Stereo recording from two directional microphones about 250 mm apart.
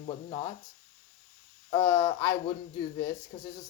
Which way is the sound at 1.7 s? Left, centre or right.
Centre.